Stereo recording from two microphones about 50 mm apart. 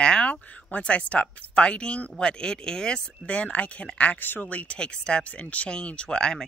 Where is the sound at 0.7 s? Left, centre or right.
Left.